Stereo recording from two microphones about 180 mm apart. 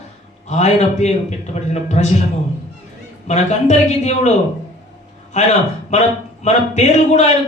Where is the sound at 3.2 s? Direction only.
40° left (ahead or behind).